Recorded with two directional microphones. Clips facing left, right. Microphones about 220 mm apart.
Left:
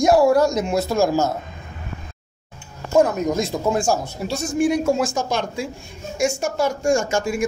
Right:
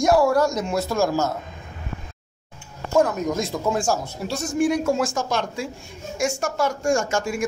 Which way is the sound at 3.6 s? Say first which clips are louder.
Left 2 dB; 25° left (ahead or behind).